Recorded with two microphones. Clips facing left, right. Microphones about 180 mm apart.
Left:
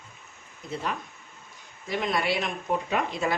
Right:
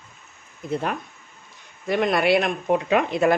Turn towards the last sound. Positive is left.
turn(degrees=-65)  # may be behind; listen again after turning